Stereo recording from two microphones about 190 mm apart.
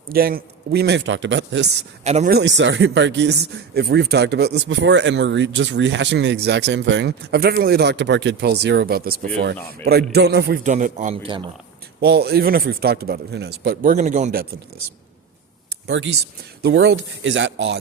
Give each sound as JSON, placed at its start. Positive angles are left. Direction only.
{"t": 0.1, "sound": "speech", "side_deg": -50}
{"t": 2.0, "sound": "a man's voice", "side_deg": -35}
{"t": 2.3, "sound": "speech", "side_deg": -75}
{"t": 10.6, "sound": "a man's voice", "side_deg": -40}
{"t": 11.9, "sound": "speech", "side_deg": -60}
{"t": 13.9, "sound": "a man's voice", "side_deg": -40}
{"t": 16.6, "sound": "speech", "side_deg": -65}